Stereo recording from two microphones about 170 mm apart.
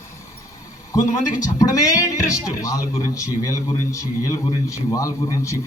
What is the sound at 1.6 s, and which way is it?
A man's voice, 20° left (ahead or behind).